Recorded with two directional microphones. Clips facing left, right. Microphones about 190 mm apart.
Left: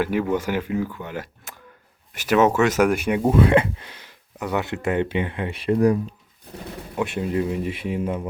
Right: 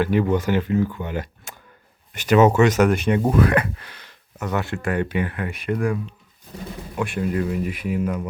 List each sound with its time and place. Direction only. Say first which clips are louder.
0.0 s speech: right 2 dB; 5° left (ahead or behind)
3.3 s speech: left 2 dB; 25° left (ahead or behind)
6.9 s speech: even; 20° left (ahead or behind)